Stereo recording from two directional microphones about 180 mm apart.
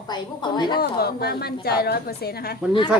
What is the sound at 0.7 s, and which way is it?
A woman's voice, 60° left (ahead or behind).